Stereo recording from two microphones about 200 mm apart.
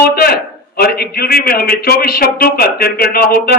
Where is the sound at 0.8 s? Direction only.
50° left (ahead or behind).